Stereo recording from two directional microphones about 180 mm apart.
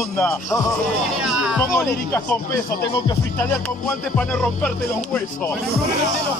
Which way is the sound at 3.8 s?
5° left (ahead or behind).